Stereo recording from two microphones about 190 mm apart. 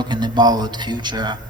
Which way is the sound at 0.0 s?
20° right (ahead or behind).